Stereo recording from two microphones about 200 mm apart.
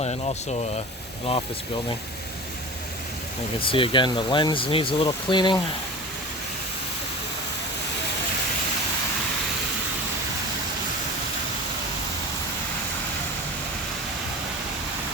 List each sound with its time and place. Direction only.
0.0 s speech: 30° left (ahead or behind)
3.6 s speech: 25° left (ahead or behind)